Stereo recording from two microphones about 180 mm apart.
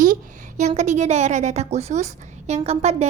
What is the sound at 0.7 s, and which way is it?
A woman's voice, 40° right (ahead or behind).